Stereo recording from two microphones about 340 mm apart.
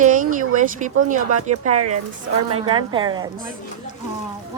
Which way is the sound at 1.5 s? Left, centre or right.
Right.